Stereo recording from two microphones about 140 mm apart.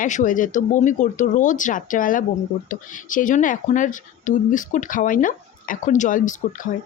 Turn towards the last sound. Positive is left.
turn(degrees=65)  # may be behind; listen again after turning